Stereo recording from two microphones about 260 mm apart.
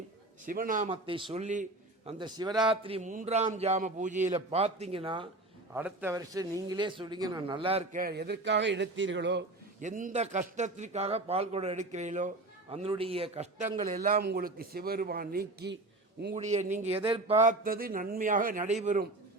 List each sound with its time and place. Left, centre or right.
0.4 s a man's voice: right
5.7 s a man's voice: centre; by 9.4 s right
9.8 s a man's voice: right
16.3 s a man's voice: right
17.4 s a man's voice: right